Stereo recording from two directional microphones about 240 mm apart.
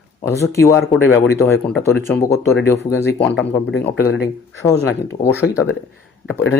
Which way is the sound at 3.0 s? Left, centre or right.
Left.